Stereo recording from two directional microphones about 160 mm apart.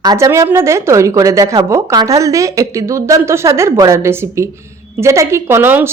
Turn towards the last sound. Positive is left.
turn(degrees=-10)  # may be behind; listen again after turning